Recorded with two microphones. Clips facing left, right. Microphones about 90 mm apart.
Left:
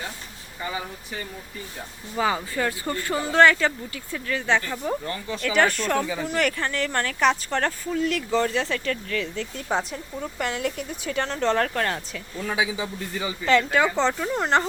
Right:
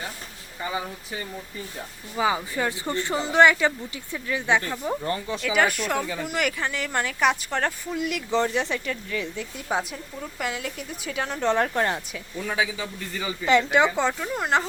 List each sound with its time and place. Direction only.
2.1 s speech: 10° right (ahead or behind)
12.1 s speech: centre (ahead or behind)
12.6 s a man's voice: 15° left (ahead or behind)
13.4 s speech: 15° right (ahead or behind)
14.1 s speech: centre (ahead or behind)